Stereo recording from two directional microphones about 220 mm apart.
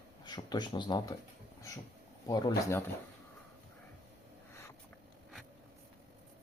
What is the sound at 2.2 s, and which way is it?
Speech, 20° left (ahead or behind).